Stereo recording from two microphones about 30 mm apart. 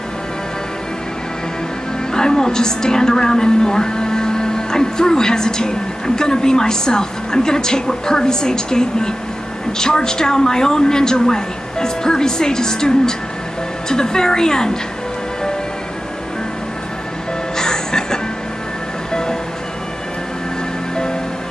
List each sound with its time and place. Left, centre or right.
2.1 s a woman's voice: left
17.6 s music: left